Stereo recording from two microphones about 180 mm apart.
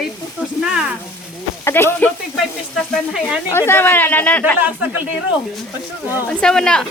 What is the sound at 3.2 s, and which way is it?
Speech, 15° left (ahead or behind).